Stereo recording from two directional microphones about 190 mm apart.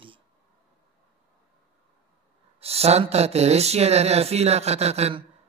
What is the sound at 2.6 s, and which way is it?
Speech, 30° right (ahead or behind).